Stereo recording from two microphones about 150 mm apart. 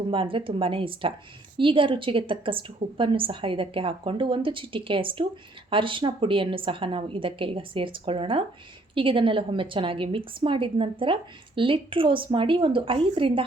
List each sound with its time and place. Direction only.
0.1 s a woman's voice: 35° right (ahead or behind)